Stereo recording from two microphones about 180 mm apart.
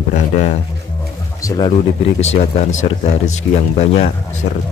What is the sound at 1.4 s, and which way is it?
Speech, 20° left (ahead or behind).